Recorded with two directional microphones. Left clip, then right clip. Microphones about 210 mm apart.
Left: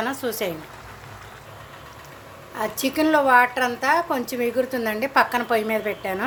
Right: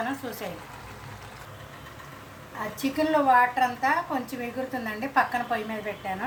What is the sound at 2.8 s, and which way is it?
A woman's voice, 55° left (ahead or behind).